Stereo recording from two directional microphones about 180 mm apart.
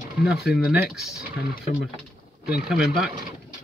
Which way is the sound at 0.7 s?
5° right (ahead or behind).